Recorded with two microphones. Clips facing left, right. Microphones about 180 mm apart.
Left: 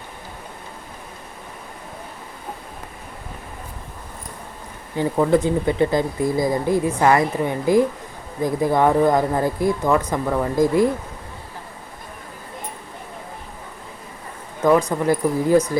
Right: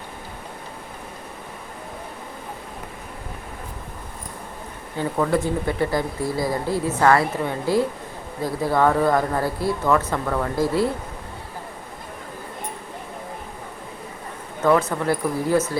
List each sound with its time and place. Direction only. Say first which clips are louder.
4.9 s speech: left 4 dB; 20° left (ahead or behind)
14.6 s speech: left 2 dB; 15° left (ahead or behind)